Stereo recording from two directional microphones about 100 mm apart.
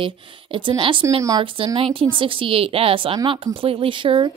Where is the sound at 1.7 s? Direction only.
70° right (ahead or behind).